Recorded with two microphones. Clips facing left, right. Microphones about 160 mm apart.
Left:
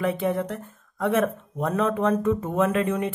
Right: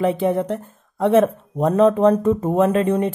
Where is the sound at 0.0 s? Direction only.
30° right (ahead or behind).